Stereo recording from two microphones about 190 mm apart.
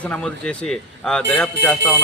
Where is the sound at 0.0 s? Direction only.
5° left (ahead or behind).